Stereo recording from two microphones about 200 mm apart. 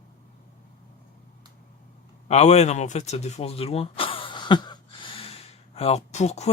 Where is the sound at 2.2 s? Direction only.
35° left (ahead or behind).